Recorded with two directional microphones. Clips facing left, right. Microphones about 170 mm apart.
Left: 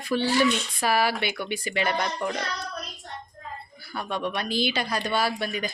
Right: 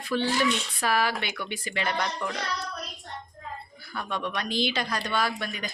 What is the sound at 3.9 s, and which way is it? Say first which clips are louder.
Speech: left 2 dB; 10° left (ahead or behind).